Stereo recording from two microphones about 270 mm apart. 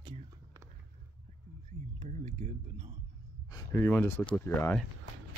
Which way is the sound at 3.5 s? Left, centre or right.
Centre.